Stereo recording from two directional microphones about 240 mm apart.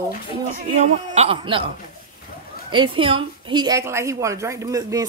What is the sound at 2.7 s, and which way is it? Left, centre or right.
A woman's voice, right.